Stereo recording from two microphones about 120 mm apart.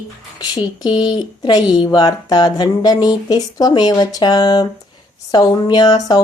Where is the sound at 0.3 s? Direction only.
35° left (ahead or behind).